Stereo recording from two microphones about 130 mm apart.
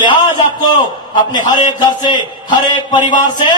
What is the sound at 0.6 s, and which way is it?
A man's voice, 35° left (ahead or behind).